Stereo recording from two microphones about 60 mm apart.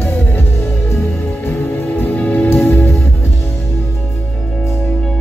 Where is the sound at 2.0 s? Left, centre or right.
Left.